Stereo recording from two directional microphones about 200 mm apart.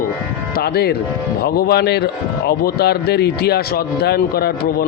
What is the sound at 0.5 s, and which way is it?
Speech, 50° left (ahead or behind).